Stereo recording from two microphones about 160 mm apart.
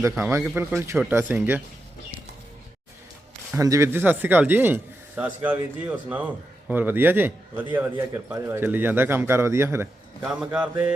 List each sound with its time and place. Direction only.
0.3 s speech: 15° right (ahead or behind)
3.5 s speech: 20° right (ahead or behind)
10.2 s speech: 5° right (ahead or behind)